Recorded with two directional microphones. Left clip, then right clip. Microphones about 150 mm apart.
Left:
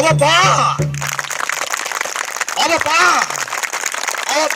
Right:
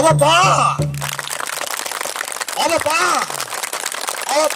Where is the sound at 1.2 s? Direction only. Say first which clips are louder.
Left 4 dB; centre (ahead or behind).